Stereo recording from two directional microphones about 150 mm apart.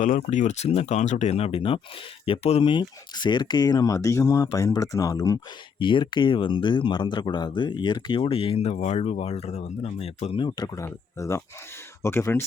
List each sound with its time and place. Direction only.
0.0 s speech: 55° left (ahead or behind); by 5.4 s 20° left (ahead or behind)
5.8 s speech: 35° left (ahead or behind)
10.8 s speech: 20° left (ahead or behind)